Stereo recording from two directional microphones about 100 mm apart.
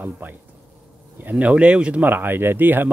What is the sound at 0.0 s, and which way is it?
Speech, 20° right (ahead or behind).